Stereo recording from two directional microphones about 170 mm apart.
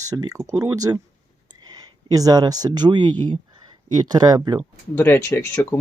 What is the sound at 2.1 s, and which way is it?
Speech, 20° right (ahead or behind).